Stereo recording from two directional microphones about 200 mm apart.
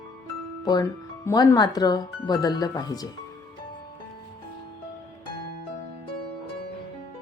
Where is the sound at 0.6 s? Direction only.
15° left (ahead or behind).